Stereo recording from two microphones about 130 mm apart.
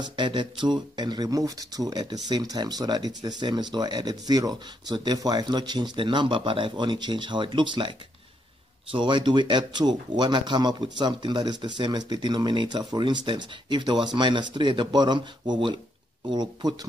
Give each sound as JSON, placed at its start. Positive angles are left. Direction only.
{"t": 0.1, "sound": "speech", "side_deg": -35}
{"t": 8.9, "sound": "speech", "side_deg": -35}